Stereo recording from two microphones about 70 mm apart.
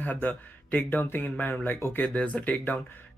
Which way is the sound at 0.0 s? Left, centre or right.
Left.